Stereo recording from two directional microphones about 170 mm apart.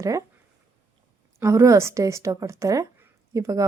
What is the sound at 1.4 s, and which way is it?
A woman's voice, 15° right (ahead or behind).